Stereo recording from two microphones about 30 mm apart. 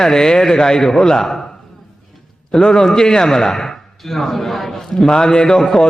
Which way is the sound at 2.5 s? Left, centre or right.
Left.